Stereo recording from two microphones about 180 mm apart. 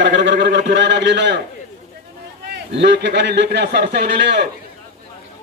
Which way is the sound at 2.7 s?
75° right (ahead or behind).